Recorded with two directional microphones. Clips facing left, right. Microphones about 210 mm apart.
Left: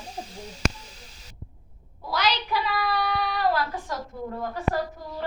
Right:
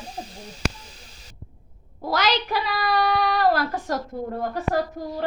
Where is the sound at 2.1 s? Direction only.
90° right.